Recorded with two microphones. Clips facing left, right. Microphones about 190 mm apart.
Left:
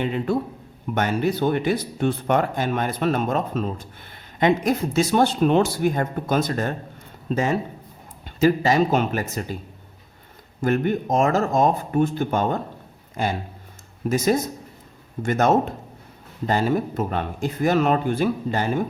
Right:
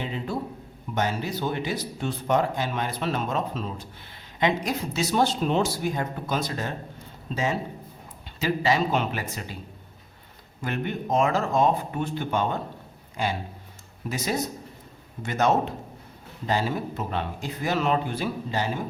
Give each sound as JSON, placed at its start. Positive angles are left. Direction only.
{"t": 0.0, "sound": "speech", "side_deg": 60}
{"t": 10.6, "sound": "speech", "side_deg": 45}